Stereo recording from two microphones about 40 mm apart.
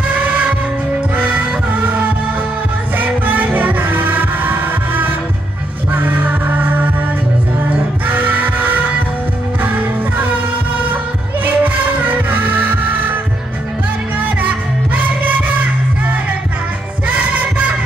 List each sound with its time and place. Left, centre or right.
0.1 s music: right
3.3 s music: right
8.1 s music: right
11.4 s music: right
15.0 s music: right
17.1 s music: right